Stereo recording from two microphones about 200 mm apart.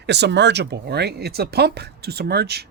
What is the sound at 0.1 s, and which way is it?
Speech, 60° right (ahead or behind).